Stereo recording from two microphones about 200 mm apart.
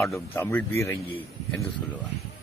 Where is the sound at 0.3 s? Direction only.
10° left (ahead or behind).